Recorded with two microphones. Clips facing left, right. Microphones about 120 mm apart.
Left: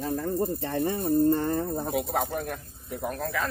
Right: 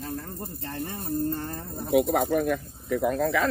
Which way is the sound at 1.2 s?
65° left (ahead or behind).